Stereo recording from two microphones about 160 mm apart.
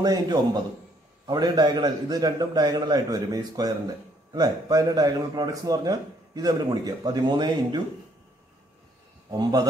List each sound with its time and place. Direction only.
0.0 s a man's voice: 25° right (ahead or behind)
9.4 s a man's voice: 25° right (ahead or behind)